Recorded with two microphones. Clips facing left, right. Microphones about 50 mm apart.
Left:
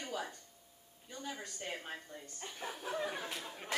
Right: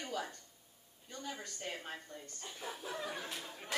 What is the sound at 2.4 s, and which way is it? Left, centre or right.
A woman's voice, left.